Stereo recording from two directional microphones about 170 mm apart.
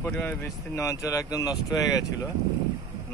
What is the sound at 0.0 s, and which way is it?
Speech, 15° left (ahead or behind).